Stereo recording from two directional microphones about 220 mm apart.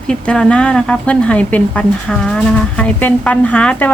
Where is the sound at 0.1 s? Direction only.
5° left (ahead or behind).